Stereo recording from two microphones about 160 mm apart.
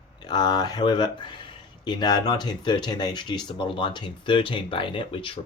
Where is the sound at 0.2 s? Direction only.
25° left (ahead or behind).